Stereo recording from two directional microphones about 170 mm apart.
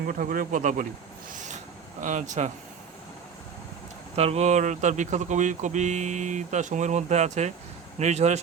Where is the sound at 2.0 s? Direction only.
45° right (ahead or behind).